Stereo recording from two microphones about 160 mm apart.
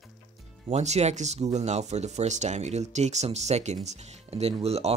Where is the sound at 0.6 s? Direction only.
45° right (ahead or behind).